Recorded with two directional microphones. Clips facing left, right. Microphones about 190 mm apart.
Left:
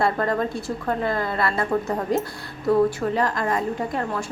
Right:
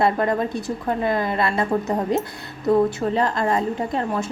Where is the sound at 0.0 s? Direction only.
20° right (ahead or behind).